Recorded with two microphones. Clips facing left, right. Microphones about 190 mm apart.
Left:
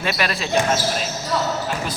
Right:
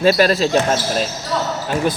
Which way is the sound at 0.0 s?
35° right (ahead or behind).